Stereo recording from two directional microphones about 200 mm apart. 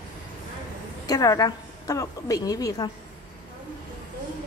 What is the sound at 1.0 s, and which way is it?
A woman's voice, 20° left (ahead or behind).